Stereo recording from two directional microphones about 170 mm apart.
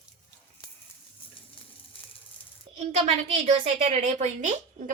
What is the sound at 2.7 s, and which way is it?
A woman's voice, 40° right (ahead or behind).